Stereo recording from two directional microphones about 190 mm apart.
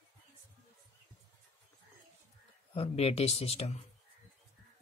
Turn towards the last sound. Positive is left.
turn(degrees=35)  # may be behind; listen again after turning